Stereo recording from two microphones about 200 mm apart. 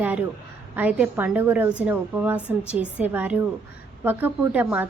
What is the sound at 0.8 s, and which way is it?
A woman's voice, 5° right (ahead or behind).